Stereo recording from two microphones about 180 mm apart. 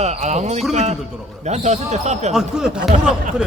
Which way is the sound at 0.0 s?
40° right (ahead or behind).